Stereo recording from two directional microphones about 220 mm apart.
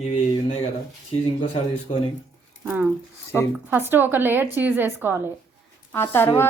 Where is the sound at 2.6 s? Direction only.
10° right (ahead or behind).